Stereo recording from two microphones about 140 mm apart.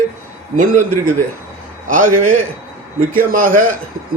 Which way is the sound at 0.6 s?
70° right (ahead or behind).